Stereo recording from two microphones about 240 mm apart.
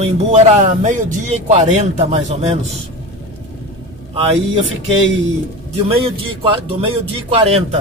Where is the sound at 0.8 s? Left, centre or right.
Right.